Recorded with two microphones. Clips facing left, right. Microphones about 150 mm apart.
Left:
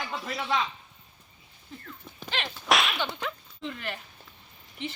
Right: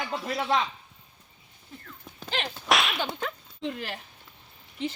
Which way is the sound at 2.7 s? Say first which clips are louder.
Even; centre (ahead or behind).